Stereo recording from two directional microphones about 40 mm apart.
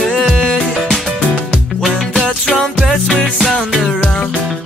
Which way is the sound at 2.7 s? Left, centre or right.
Centre.